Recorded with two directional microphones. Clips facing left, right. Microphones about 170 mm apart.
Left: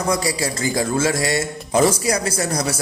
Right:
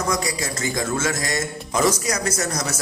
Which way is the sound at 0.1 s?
30° left (ahead or behind).